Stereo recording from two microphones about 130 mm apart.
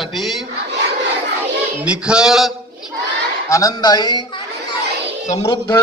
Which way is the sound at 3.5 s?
25° left (ahead or behind).